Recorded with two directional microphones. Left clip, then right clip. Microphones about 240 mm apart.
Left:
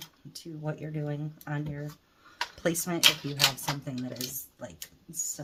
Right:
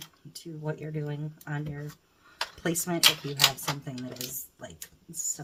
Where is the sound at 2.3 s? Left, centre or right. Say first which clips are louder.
Left 1 dB; centre.